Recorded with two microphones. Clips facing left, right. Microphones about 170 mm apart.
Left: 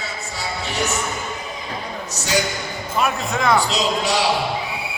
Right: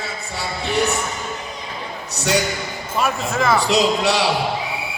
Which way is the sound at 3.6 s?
65° right (ahead or behind).